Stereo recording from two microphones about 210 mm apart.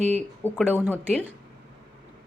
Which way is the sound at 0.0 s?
35° right (ahead or behind).